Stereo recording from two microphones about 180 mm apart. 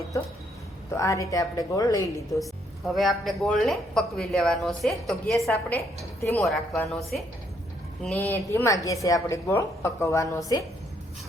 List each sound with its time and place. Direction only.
0.9 s a woman's voice: 15° left (ahead or behind)
2.4 s speech: centre (ahead or behind)
8.1 s a woman's voice: 15° left (ahead or behind)